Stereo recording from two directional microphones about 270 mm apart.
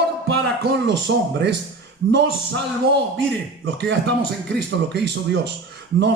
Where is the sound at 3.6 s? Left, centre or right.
Right.